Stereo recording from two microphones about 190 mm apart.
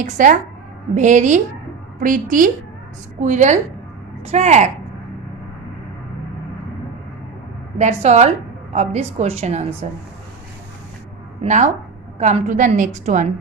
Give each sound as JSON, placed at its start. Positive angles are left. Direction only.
{"t": 0.0, "sound": "a woman's voice", "side_deg": -40}
{"t": 7.8, "sound": "a woman's voice", "side_deg": -35}
{"t": 11.4, "sound": "a woman's voice", "side_deg": -40}